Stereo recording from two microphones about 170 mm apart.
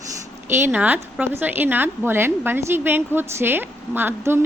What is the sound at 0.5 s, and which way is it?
A woman's voice, 10° right (ahead or behind).